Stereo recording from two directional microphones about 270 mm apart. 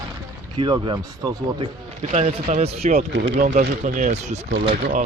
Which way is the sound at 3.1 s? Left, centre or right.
Right.